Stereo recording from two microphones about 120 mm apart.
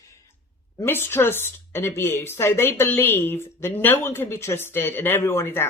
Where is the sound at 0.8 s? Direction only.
20° left (ahead or behind).